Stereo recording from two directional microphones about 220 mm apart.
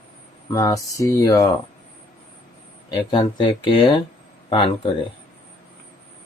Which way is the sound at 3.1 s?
20° left (ahead or behind).